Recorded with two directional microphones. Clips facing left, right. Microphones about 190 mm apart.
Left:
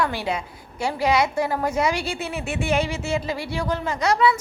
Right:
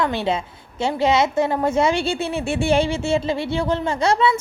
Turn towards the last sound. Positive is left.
turn(degrees=-25)  # may be behind; listen again after turning